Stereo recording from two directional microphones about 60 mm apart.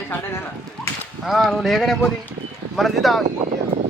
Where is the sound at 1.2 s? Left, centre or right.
Centre.